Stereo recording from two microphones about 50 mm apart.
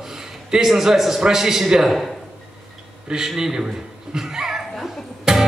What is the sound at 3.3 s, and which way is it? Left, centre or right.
Speech, centre.